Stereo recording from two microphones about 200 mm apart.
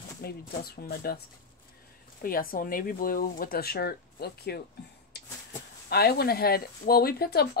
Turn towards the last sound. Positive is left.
turn(degrees=50)  # may be behind; listen again after turning